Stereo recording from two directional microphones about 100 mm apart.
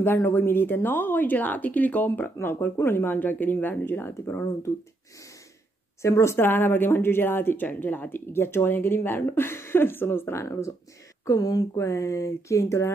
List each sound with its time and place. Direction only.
0.0 s speech: 20° left (ahead or behind)
6.0 s speech: 30° left (ahead or behind)
11.2 s speech: 40° left (ahead or behind)